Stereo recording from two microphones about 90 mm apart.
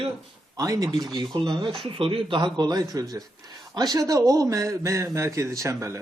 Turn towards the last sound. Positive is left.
turn(degrees=-35)  # may be behind; listen again after turning